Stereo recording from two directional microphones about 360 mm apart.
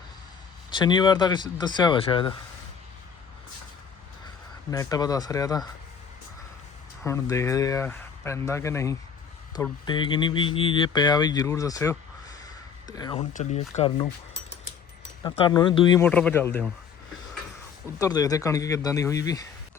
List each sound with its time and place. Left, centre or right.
0.7 s speech: centre
4.7 s speech: centre
7.0 s speech: centre
18.0 s speech: centre